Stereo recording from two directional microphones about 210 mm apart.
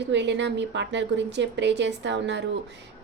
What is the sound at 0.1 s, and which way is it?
A woman's voice, 55° right (ahead or behind).